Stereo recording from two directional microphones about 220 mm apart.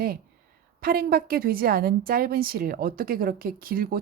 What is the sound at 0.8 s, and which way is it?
A woman's voice, 40° right (ahead or behind).